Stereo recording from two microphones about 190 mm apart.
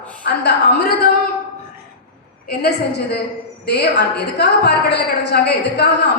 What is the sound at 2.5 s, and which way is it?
A woman's voice, 60° left (ahead or behind).